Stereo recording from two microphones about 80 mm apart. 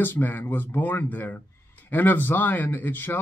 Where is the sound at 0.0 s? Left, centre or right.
Left.